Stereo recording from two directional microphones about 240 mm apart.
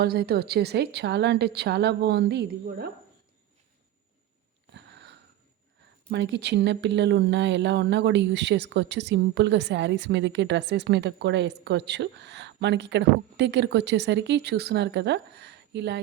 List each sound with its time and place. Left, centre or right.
0.0 s speech: right
4.7 s sniff: right
6.1 s speech: right